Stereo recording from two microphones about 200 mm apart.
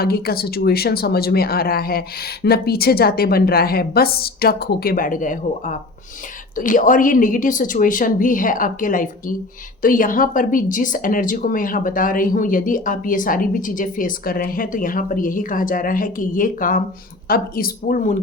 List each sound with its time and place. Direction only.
0.0 s a woman's voice: 50° left (ahead or behind)